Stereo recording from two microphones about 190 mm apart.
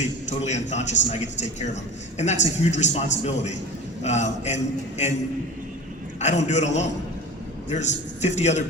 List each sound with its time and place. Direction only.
0.3 s a man's voice: 35° left (ahead or behind)
6.1 s a man's voice: 35° left (ahead or behind)